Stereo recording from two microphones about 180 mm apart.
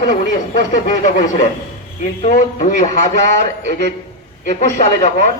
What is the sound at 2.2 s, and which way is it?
Speech, 45° left (ahead or behind).